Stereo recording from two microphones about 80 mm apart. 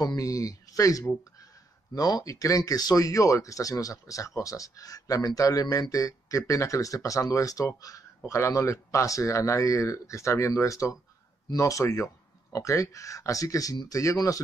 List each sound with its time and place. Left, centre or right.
0.0 s speech: left
2.0 s speech: left